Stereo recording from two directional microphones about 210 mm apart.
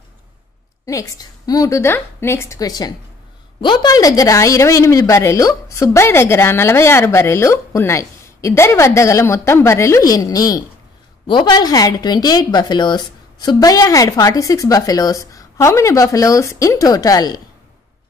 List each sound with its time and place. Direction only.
0.8 s a woman's voice: 15° left (ahead or behind)